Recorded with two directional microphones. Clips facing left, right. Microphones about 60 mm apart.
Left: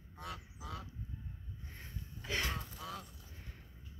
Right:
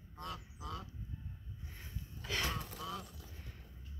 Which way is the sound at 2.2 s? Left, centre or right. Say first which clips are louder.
Left 1 dB; left.